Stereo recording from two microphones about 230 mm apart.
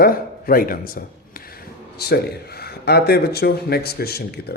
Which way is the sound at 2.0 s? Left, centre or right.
Left.